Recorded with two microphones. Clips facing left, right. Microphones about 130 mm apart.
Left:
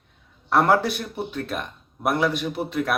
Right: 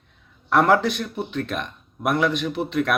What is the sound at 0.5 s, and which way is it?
Speech, 10° left (ahead or behind).